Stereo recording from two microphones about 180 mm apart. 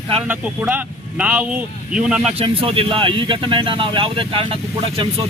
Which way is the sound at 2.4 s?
30° right (ahead or behind).